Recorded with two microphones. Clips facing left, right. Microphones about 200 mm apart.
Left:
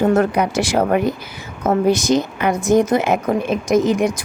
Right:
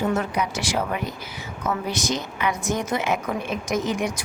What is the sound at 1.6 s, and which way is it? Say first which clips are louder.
A woman's voice: left 11 dB; 45° left (ahead or behind).